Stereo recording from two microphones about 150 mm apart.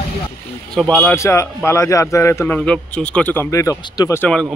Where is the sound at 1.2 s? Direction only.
20° left (ahead or behind).